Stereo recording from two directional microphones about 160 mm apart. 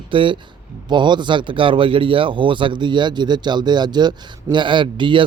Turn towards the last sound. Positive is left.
turn(degrees=-30)  # may be behind; listen again after turning